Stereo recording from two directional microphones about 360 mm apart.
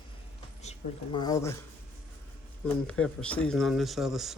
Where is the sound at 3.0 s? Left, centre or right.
Centre.